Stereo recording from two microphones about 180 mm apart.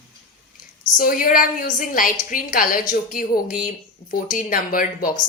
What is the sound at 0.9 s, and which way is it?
Speech, 50° left (ahead or behind).